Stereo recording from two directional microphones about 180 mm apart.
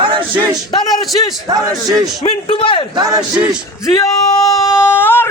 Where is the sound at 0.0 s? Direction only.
30° right (ahead or behind).